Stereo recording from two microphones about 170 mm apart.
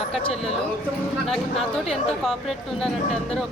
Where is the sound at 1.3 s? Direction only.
Centre (ahead or behind).